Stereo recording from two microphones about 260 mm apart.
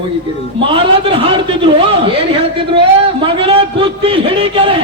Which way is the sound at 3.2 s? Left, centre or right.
Right.